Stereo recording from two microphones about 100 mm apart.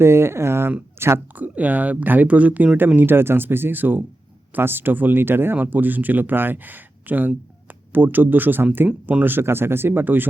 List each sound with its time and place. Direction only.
0.0 s speech: 25° right (ahead or behind)